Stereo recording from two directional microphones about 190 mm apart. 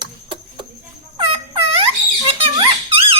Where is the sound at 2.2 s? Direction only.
30° right (ahead or behind).